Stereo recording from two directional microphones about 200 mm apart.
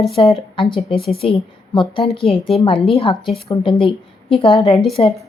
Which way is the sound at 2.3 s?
25° left (ahead or behind).